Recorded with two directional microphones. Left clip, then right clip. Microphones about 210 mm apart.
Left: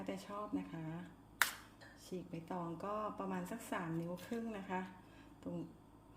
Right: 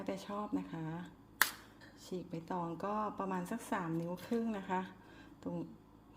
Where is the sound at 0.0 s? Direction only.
30° right (ahead or behind).